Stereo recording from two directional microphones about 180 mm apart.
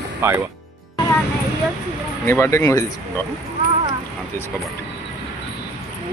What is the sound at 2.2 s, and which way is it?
Speech, 15° left (ahead or behind).